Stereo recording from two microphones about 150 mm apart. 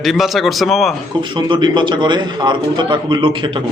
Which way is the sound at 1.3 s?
30° right (ahead or behind).